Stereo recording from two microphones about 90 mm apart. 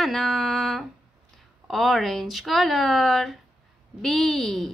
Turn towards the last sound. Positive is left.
turn(degrees=5)  # may be behind; listen again after turning